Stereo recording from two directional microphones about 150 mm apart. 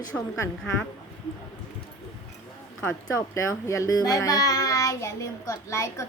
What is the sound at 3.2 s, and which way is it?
A child's voice, 20° left (ahead or behind).